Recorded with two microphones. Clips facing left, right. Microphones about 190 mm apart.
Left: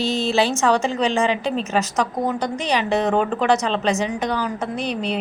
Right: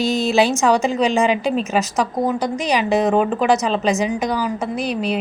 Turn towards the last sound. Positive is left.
turn(degrees=-5)  # may be behind; listen again after turning